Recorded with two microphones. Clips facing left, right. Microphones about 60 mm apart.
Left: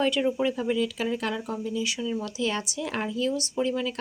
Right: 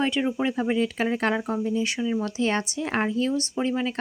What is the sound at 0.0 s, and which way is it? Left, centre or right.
A woman's voice, right.